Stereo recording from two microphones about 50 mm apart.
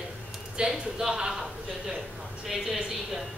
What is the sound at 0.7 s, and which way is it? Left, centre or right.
Speech, centre.